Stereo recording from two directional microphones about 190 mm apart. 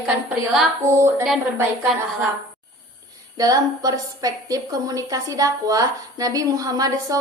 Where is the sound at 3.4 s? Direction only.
20° right (ahead or behind).